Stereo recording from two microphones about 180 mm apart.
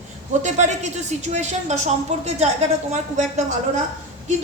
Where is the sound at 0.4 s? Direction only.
40° right (ahead or behind).